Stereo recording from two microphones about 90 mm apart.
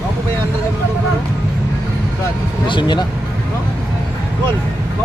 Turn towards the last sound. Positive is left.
turn(degrees=60)  # may be behind; listen again after turning